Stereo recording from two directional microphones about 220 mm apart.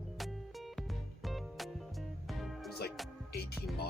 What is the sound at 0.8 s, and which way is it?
Music, centre (ahead or behind).